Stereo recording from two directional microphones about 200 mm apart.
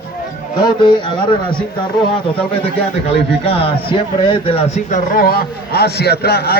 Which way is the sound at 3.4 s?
30° left (ahead or behind).